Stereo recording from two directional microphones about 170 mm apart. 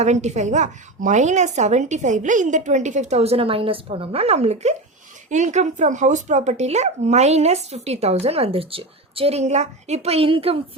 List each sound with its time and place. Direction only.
0.0 s a woman's voice: 40° right (ahead or behind)